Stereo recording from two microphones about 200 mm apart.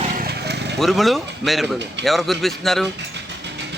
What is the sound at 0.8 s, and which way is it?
A man's voice, centre (ahead or behind).